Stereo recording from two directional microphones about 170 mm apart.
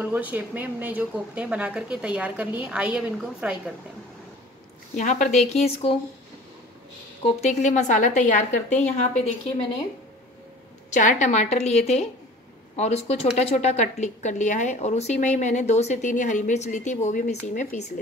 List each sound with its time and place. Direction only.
0.0 s speech: 10° right (ahead or behind)
4.9 s a woman's voice: 45° left (ahead or behind)
7.2 s a woman's voice: 40° left (ahead or behind)
10.9 s a woman's voice: 50° left (ahead or behind)